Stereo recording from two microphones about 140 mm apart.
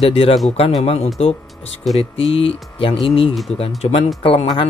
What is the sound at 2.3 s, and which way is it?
Speech, 40° left (ahead or behind).